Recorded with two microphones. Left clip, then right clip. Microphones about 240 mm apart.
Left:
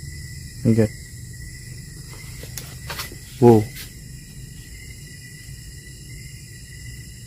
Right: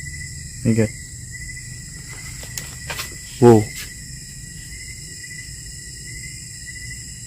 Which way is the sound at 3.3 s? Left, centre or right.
Centre.